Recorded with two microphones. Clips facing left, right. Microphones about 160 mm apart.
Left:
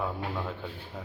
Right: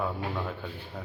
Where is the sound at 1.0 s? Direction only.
Centre (ahead or behind).